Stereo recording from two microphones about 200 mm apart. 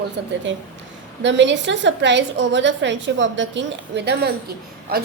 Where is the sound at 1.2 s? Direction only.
65° right (ahead or behind).